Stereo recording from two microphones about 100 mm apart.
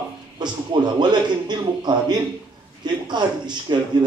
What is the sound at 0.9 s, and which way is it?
Speech, 45° right (ahead or behind).